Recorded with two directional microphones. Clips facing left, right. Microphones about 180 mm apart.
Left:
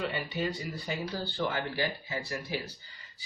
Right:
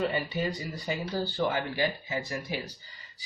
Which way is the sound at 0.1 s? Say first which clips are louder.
Right 3 dB; 40° right (ahead or behind).